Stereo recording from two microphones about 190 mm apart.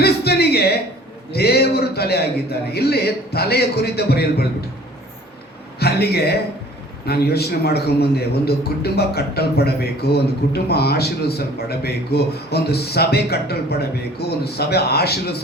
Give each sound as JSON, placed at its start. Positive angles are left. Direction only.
{"t": 0.0, "sound": "a sound", "side_deg": 55}
{"t": 1.3, "sound": "speech", "side_deg": 55}
{"t": 5.8, "sound": "speech", "side_deg": 55}